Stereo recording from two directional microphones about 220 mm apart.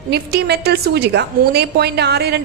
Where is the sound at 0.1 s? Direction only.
50° right (ahead or behind).